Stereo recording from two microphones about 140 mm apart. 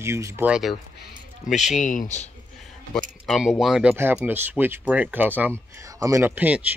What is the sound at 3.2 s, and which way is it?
Speech, centre (ahead or behind).